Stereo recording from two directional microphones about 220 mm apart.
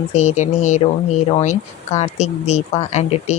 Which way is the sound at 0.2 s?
30° left (ahead or behind).